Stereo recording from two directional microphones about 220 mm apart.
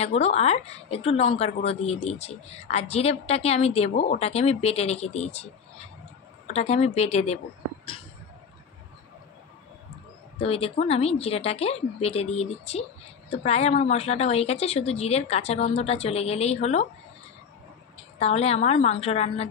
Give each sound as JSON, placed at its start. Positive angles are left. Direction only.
{"t": 0.0, "sound": "a woman's voice", "side_deg": 30}
{"t": 10.4, "sound": "a woman's voice", "side_deg": 25}
{"t": 18.2, "sound": "a woman's voice", "side_deg": 30}